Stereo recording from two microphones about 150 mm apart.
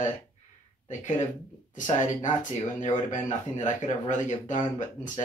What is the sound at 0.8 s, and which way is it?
Speech, 55° left (ahead or behind).